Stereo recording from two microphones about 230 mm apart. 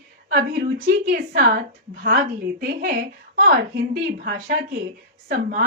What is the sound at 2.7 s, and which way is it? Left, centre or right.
A woman's voice, right.